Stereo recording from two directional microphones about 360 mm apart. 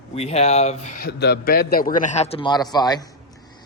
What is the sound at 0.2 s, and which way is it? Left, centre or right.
A man's voice, centre.